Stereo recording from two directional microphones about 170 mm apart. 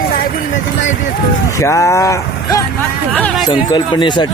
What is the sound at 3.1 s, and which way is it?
Speech, 10° left (ahead or behind).